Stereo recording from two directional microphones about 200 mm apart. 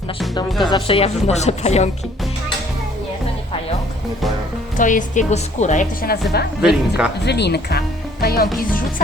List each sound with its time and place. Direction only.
0.6 s a woman's voice: 25° left (ahead or behind)
4.8 s a woman's voice: 40° left (ahead or behind)
6.6 s speech: 5° right (ahead or behind)
7.3 s speech: 55° left (ahead or behind)